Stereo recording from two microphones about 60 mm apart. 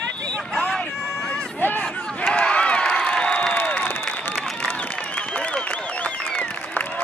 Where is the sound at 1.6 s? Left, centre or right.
Left.